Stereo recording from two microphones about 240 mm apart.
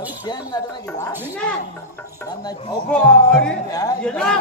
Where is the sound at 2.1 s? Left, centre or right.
Centre.